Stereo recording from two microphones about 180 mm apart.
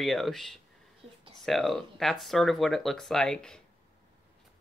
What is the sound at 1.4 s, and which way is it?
Speech, centre (ahead or behind).